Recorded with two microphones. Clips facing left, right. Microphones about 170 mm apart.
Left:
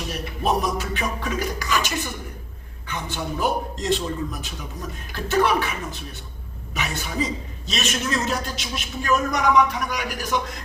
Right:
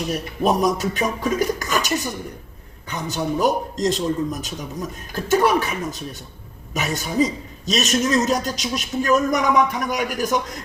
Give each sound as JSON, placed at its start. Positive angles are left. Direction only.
{"t": 0.1, "sound": "a man's voice", "side_deg": -40}